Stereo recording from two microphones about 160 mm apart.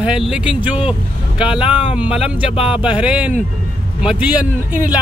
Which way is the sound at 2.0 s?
5° right (ahead or behind).